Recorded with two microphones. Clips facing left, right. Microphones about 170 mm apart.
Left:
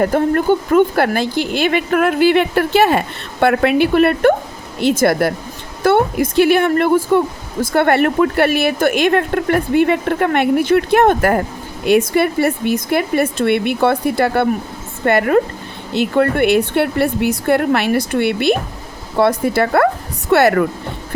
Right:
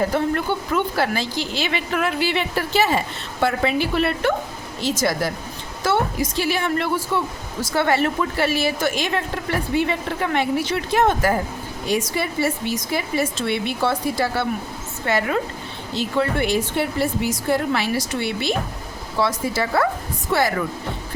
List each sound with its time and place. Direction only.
0.0 s a woman's voice: 50° left (ahead or behind)